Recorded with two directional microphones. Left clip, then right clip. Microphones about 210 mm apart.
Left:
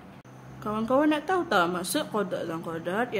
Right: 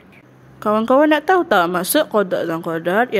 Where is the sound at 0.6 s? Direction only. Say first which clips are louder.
Right 11 dB; 40° right (ahead or behind).